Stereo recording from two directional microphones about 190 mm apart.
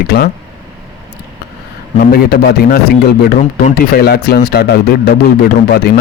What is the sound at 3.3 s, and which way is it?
Speech, 45° left (ahead or behind).